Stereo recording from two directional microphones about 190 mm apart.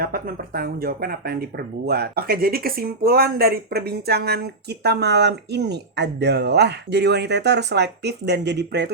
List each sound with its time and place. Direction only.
0.0 s speech: 50° right (ahead or behind)